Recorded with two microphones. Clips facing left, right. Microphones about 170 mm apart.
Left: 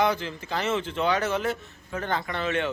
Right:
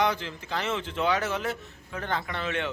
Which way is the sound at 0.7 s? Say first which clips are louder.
Left 2 dB; centre (ahead or behind).